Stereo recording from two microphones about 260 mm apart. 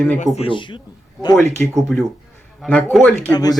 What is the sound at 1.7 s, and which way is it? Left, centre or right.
Speech, centre.